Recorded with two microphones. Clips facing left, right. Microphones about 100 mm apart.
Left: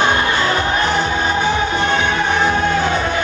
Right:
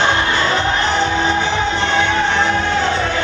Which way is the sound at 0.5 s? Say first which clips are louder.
Even; 15° left (ahead or behind).